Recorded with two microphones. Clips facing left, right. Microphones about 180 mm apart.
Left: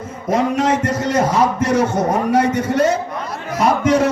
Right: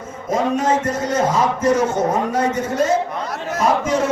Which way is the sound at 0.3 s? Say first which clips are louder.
Left 2 dB; 70° left (ahead or behind).